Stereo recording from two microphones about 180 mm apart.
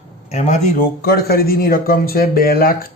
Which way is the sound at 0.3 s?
40° left (ahead or behind).